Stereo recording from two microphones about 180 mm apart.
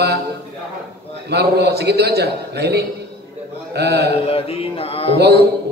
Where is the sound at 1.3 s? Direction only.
65° right (ahead or behind).